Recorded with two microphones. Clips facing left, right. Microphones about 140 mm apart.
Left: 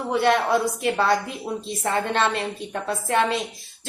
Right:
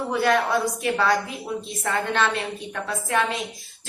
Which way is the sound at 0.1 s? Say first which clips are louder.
Left 2 dB; 25° left (ahead or behind).